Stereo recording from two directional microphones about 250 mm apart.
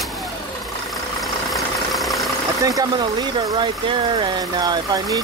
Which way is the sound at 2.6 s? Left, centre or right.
Centre.